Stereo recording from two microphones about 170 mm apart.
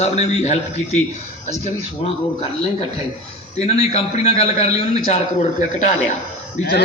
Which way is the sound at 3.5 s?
40° left (ahead or behind).